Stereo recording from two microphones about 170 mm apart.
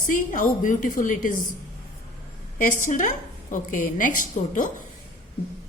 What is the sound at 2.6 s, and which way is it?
A woman's voice, 50° left (ahead or behind).